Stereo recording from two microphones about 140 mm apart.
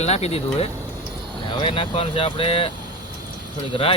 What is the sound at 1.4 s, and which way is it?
Speech, 35° left (ahead or behind).